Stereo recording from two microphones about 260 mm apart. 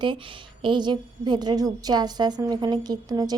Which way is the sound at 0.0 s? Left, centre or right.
Centre.